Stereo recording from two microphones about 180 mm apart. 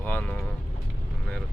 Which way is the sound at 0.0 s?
10° left (ahead or behind).